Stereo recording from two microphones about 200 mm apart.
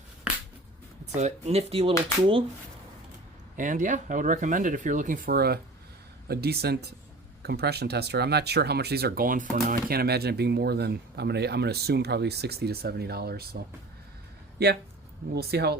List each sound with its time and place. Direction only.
1.1 s speech: 30° right (ahead or behind)
3.6 s speech: 40° right (ahead or behind)
15.4 s speech: 55° right (ahead or behind)